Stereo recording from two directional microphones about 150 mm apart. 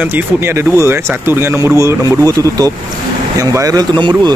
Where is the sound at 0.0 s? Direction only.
15° right (ahead or behind).